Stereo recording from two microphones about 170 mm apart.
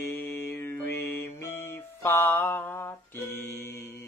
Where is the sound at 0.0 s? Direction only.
15° left (ahead or behind).